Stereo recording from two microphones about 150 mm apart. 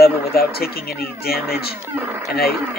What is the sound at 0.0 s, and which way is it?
Speech, 90° left.